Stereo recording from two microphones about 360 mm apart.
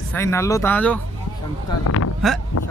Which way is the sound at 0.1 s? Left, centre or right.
Centre.